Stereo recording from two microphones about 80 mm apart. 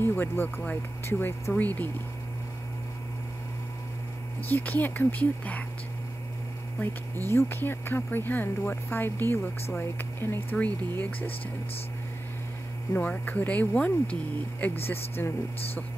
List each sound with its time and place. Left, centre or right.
0.0 s speech: left
4.5 s speech: left
7.2 s speech: left
12.9 s speech: left